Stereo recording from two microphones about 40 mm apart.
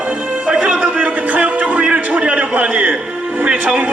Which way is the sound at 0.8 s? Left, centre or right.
Right.